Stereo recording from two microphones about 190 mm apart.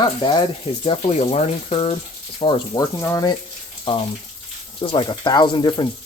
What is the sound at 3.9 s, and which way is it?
Speech, 30° left (ahead or behind).